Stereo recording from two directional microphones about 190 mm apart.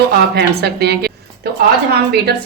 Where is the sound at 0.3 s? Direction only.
55° right (ahead or behind).